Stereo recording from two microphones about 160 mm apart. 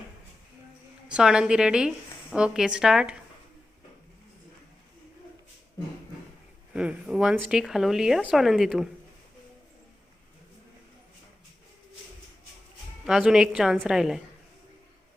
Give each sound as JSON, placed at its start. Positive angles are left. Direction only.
{"t": 1.0, "sound": "speech", "side_deg": -5}
{"t": 6.7, "sound": "speech", "side_deg": -5}
{"t": 13.1, "sound": "speech", "side_deg": -5}